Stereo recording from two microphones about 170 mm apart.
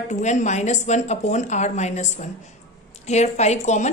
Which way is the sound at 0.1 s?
45° left (ahead or behind).